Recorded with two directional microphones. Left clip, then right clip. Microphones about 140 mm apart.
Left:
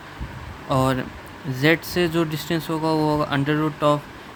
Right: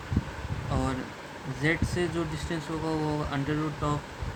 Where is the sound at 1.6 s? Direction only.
65° left (ahead or behind).